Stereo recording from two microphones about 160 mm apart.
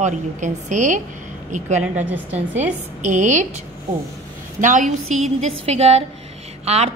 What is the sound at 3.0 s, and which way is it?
A woman's voice, 50° right (ahead or behind).